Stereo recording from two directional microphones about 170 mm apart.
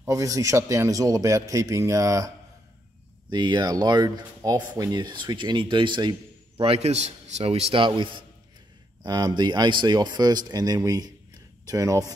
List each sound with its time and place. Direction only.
0.0 s speech: 20° right (ahead or behind)